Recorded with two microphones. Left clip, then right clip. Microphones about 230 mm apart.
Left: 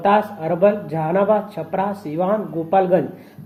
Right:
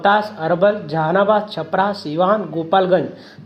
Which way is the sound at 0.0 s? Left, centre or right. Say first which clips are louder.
Right 1 dB; right.